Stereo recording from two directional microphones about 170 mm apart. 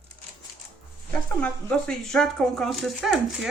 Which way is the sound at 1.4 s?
5° left (ahead or behind).